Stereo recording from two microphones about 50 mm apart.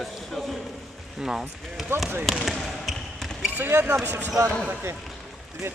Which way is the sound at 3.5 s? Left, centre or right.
Right.